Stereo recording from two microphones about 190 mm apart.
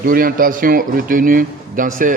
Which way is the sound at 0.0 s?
50° right (ahead or behind).